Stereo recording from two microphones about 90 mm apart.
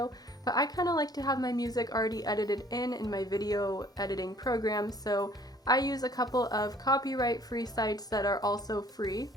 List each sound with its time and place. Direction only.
0.0 s speech: 45° left (ahead or behind)